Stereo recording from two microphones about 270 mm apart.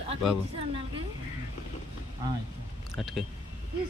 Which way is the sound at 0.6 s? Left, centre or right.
Right.